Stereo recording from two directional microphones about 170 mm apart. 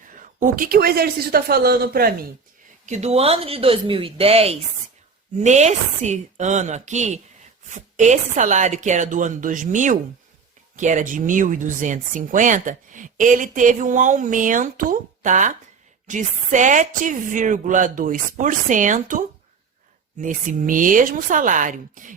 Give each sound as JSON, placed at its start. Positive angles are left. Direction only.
{"t": 0.2, "sound": "a man's voice", "side_deg": -55}
{"t": 2.8, "sound": "speech", "side_deg": -40}
{"t": 20.2, "sound": "speech", "side_deg": -50}